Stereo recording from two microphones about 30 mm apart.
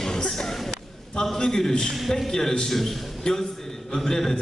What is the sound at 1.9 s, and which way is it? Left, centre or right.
A man's voice, centre.